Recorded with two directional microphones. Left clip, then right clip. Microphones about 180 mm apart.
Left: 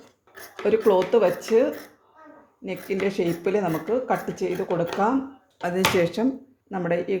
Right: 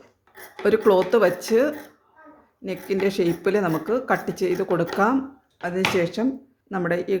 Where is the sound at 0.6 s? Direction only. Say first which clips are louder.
Right 2 dB; 20° right (ahead or behind).